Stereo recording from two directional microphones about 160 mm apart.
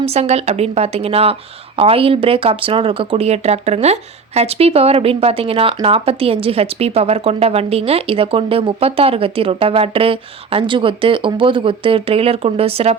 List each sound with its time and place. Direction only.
0.0 s speech: 40° right (ahead or behind)